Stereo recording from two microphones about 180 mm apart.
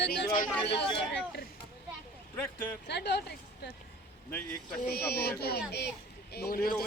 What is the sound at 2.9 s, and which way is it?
Speech, 70° left (ahead or behind).